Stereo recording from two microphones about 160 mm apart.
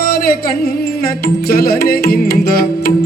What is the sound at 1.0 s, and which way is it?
Music, 70° left (ahead or behind).